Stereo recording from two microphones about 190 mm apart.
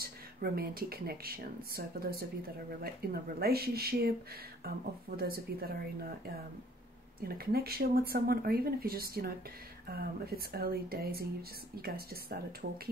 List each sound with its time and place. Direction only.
0.0 s speech: 55° right (ahead or behind)